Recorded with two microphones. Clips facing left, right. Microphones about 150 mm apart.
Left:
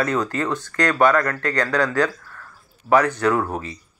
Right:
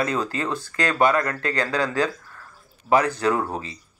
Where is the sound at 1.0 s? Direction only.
20° right (ahead or behind).